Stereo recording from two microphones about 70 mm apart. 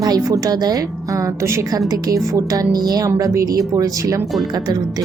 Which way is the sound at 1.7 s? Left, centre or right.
Right.